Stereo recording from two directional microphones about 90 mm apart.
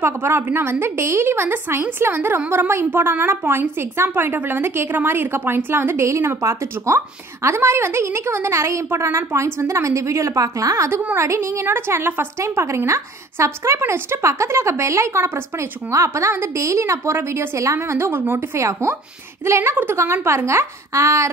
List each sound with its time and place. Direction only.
0.0 s a woman's voice: 25° right (ahead or behind)
10.9 s a woman's voice: 15° right (ahead or behind)
11.1 s a woman's voice: 30° right (ahead or behind)